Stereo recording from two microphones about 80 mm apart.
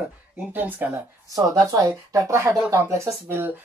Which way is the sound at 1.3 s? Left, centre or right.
Right.